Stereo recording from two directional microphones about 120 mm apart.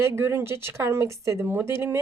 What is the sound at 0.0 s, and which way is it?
Speech, 25° right (ahead or behind).